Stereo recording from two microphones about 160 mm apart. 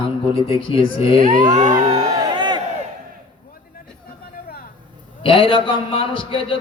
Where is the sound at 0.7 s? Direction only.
35° left (ahead or behind).